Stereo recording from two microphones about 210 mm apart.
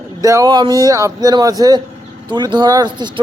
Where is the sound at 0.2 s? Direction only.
15° right (ahead or behind).